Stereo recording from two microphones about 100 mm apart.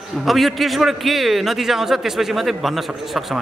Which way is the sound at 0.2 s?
Centre (ahead or behind).